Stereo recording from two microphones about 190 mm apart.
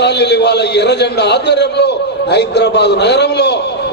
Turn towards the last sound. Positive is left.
turn(degrees=60)  # may be behind; listen again after turning